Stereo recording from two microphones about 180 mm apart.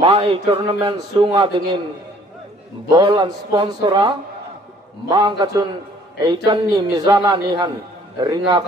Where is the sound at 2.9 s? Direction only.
25° right (ahead or behind).